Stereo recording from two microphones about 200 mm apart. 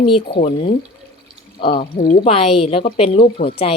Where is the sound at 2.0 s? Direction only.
30° left (ahead or behind).